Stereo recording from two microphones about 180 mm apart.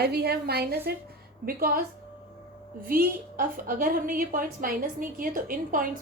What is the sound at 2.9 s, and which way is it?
A woman's voice, 50° right (ahead or behind).